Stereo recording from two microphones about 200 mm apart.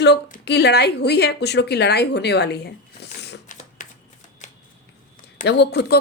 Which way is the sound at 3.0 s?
55° left (ahead or behind).